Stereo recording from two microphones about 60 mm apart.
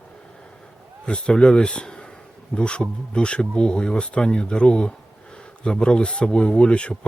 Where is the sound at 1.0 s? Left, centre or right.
Centre.